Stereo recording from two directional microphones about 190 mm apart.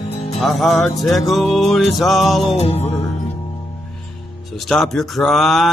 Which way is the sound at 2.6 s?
35° left (ahead or behind).